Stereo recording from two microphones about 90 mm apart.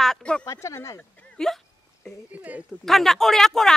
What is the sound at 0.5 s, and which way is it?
Speech, 30° left (ahead or behind).